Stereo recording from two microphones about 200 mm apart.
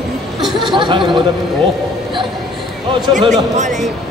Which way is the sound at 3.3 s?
35° right (ahead or behind).